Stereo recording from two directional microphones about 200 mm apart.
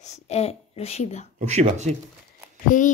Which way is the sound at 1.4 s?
35° right (ahead or behind).